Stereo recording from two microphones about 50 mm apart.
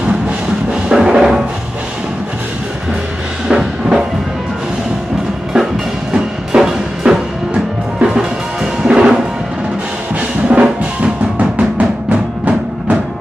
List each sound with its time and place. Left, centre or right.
0.8 s music: centre
3.4 s music: centre
6.1 s music: centre
10.5 s music: right